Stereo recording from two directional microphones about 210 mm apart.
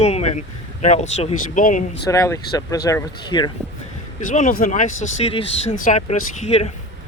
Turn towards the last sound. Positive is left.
turn(degrees=30)  # may be behind; listen again after turning